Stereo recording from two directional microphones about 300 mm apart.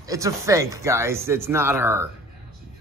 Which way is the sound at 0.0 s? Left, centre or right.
Centre.